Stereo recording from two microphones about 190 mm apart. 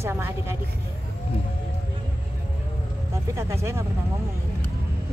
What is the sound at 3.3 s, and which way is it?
Speech, 15° right (ahead or behind).